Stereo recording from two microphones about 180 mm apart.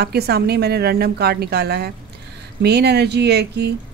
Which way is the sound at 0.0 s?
60° right (ahead or behind).